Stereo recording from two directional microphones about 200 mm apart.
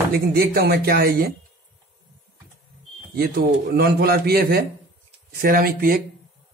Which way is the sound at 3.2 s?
50° right (ahead or behind).